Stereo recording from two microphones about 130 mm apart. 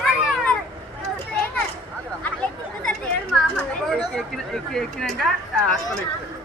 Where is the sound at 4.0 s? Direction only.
Centre (ahead or behind).